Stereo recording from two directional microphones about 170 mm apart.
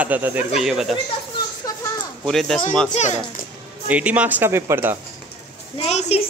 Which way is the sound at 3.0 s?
40° left (ahead or behind).